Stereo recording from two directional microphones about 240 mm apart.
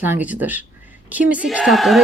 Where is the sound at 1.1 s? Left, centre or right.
Centre.